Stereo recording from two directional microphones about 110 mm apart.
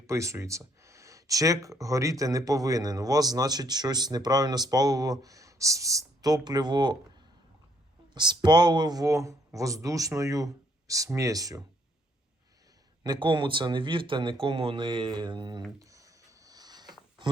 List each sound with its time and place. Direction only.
0.1 s speech: 25° right (ahead or behind)
8.1 s speech: 40° right (ahead or behind)
13.0 s speech: 45° right (ahead or behind)
15.8 s a sound: 30° right (ahead or behind)